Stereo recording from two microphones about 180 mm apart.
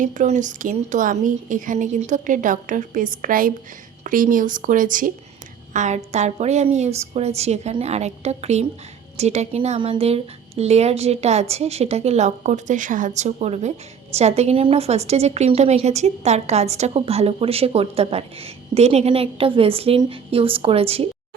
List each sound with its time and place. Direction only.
0.0 s a woman's voice: 45° right (ahead or behind)